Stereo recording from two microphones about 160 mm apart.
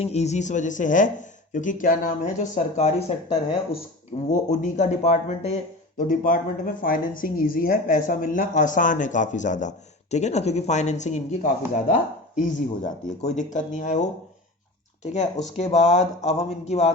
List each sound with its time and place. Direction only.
0.0 s a woman's voice: 40° left (ahead or behind)
6.0 s a woman's voice: 60° left (ahead or behind)